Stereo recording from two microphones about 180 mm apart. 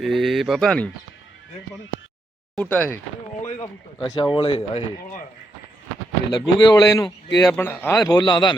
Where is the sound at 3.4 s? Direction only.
30° left (ahead or behind).